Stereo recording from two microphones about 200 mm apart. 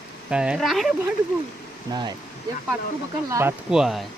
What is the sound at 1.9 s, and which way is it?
Speech, 20° right (ahead or behind).